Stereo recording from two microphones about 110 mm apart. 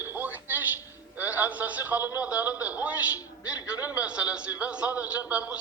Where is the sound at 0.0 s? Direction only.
20° right (ahead or behind).